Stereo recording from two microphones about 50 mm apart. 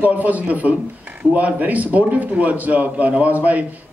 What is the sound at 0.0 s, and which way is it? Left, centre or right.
A man's voice, right.